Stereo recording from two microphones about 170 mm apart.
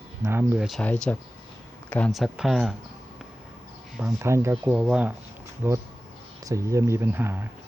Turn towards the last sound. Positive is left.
turn(degrees=-15)  # may be behind; listen again after turning